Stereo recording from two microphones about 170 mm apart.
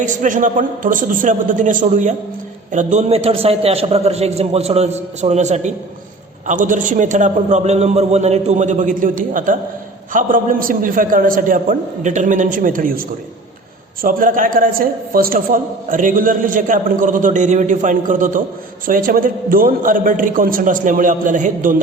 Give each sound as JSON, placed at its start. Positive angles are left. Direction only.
{"t": 0.0, "sound": "a man's voice", "side_deg": -50}